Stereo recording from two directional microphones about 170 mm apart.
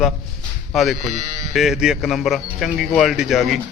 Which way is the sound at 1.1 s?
50° right (ahead or behind).